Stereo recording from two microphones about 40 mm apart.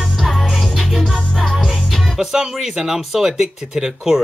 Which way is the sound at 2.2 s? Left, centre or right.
Centre.